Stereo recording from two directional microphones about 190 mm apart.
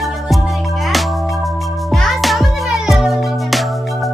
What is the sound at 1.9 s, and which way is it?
Music, centre (ahead or behind).